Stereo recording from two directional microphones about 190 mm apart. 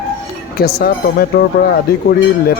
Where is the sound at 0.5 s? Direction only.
55° left (ahead or behind).